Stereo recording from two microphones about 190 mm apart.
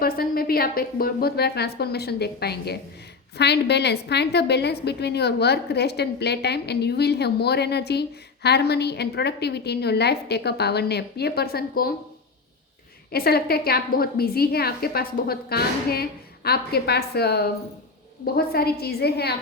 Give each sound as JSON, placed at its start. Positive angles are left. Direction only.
{"t": 0.0, "sound": "a woman's voice", "side_deg": 50}
{"t": 13.1, "sound": "a woman's voice", "side_deg": 55}